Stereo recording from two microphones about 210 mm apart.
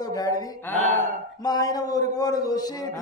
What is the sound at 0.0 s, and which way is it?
Mantra, 15° left (ahead or behind).